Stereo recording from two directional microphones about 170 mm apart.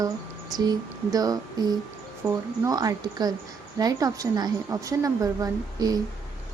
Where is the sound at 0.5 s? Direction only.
25° right (ahead or behind).